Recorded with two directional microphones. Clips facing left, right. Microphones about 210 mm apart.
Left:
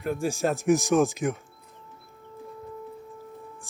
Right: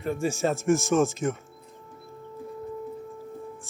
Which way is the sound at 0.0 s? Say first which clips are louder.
Even; centre (ahead or behind).